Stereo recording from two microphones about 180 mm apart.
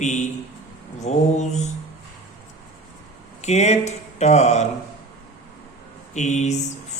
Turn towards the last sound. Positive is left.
turn(degrees=40)  # may be behind; listen again after turning